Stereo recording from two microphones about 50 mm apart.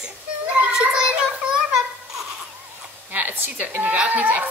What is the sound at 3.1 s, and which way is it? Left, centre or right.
Speech, right.